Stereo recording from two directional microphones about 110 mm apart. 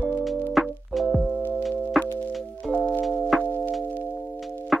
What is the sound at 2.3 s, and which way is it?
Music, centre (ahead or behind).